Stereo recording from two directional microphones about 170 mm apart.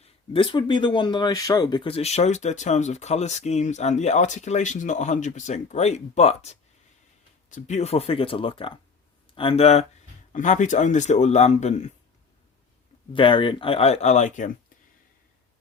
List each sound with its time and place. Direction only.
0.0 s speech: 30° left (ahead or behind)
13.1 s speech: 30° left (ahead or behind); by 14.5 s 45° left (ahead or behind)